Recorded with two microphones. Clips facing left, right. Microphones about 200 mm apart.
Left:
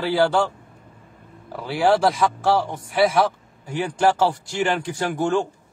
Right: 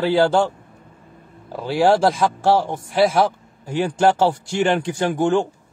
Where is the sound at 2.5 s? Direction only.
25° right (ahead or behind).